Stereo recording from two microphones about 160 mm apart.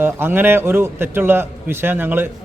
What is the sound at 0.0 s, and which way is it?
A man's voice, 15° right (ahead or behind).